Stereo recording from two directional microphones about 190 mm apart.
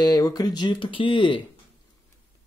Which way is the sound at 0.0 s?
20° left (ahead or behind).